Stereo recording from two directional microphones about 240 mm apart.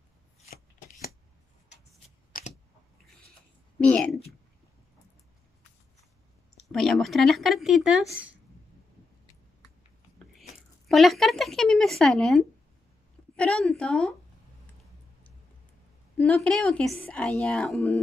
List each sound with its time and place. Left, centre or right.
0.5 s shuffling cards: left
2.0 s shuffling cards: left
3.8 s speech: centre
6.7 s a woman's voice: centre
10.9 s a woman's voice: centre
16.2 s a woman's voice: centre